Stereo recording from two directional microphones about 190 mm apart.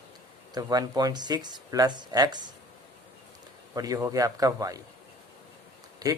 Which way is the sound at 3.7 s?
20° right (ahead or behind).